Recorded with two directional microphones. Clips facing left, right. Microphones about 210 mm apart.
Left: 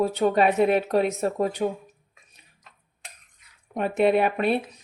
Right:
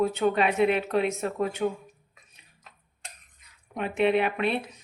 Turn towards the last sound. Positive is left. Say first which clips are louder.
# left 3 dB
turn(degrees=45)  # may be behind; listen again after turning